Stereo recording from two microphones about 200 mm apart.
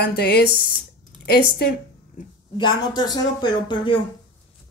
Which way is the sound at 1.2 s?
50° left (ahead or behind).